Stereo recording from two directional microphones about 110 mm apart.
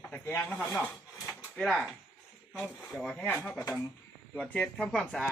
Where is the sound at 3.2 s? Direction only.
20° left (ahead or behind).